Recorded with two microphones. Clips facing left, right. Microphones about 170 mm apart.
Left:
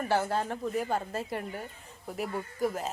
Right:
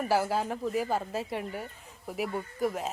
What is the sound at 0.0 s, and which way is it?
Speech, 5° right (ahead or behind).